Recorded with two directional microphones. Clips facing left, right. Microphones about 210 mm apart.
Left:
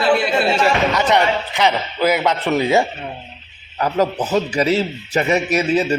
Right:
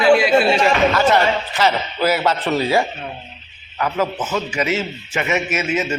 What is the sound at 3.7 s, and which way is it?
A man's voice, 35° left (ahead or behind).